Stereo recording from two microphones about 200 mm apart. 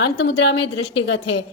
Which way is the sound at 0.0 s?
65° left (ahead or behind).